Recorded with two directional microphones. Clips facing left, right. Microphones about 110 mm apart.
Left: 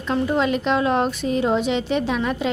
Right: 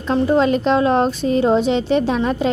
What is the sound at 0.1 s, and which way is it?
A woman's voice, 30° right (ahead or behind).